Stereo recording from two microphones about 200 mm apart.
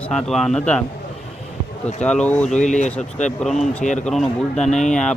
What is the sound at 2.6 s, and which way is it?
Speech, 35° left (ahead or behind).